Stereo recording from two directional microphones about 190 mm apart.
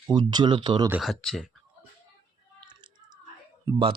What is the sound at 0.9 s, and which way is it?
Speech, 5° right (ahead or behind).